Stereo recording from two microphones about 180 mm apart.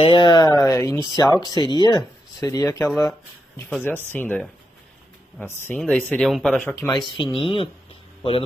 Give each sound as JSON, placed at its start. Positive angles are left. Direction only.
{"t": 0.0, "sound": "speech", "side_deg": 25}
{"t": 6.7, "sound": "speech", "side_deg": 20}